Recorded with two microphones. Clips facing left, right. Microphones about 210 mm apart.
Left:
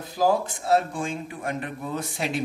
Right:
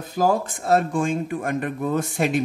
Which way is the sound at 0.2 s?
50° right (ahead or behind).